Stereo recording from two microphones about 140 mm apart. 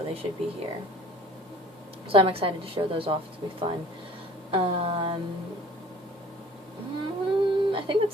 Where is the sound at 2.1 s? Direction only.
40° right (ahead or behind).